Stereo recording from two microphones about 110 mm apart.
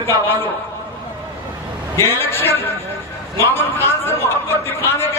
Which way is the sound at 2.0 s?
20° left (ahead or behind).